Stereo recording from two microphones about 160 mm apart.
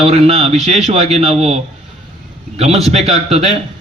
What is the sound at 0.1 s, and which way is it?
A man's voice, 40° right (ahead or behind).